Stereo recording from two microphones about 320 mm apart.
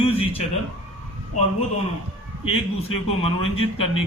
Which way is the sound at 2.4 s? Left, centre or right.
Centre.